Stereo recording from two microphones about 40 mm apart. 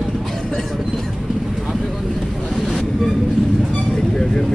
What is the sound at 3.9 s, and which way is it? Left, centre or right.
Vehicle, centre.